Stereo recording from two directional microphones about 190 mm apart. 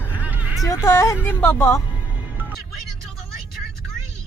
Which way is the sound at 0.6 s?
15° left (ahead or behind).